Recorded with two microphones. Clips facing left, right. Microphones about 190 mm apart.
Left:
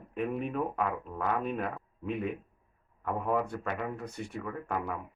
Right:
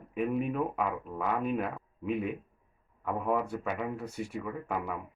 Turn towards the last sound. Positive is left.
turn(degrees=-5)  # may be behind; listen again after turning